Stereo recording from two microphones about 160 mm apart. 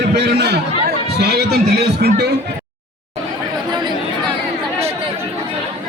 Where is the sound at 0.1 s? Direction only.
90° right.